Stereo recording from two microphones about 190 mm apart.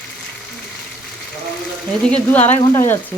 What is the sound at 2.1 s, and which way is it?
Speech, 10° left (ahead or behind).